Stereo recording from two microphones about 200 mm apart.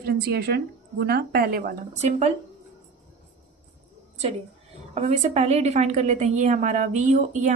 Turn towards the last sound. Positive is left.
turn(degrees=-40)  # may be behind; listen again after turning